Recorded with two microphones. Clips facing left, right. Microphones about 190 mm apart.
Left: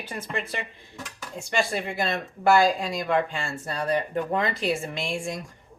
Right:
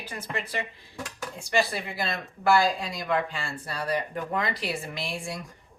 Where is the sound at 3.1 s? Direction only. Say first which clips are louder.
Left 2 dB; 25° left (ahead or behind).